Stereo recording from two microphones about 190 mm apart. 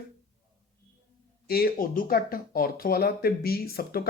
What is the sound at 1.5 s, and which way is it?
Speech, 50° left (ahead or behind).